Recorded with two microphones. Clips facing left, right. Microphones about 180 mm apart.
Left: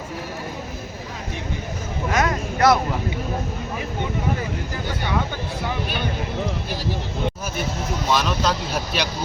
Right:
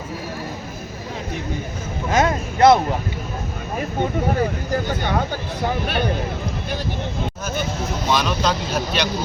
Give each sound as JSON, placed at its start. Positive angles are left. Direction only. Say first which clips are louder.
{"t": 2.0, "sound": "a sound", "louder": "right 3 dB", "side_deg": -25}
{"t": 4.4, "sound": "speech", "louder": "right 7 dB", "side_deg": -45}
{"t": 8.1, "sound": "speech", "louder": "right 1 dB", "side_deg": 0}